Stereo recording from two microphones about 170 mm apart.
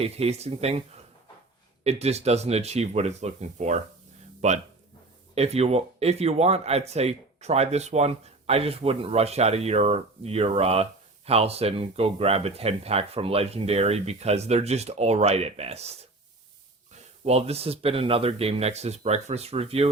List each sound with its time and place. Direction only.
0.0 s speech: 35° right (ahead or behind)
1.8 s speech: 40° right (ahead or behind)
17.2 s speech: 35° right (ahead or behind)